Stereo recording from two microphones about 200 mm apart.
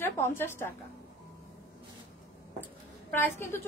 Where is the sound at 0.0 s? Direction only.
10° left (ahead or behind).